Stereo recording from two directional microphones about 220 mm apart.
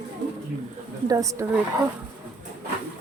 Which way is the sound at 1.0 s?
15° right (ahead or behind).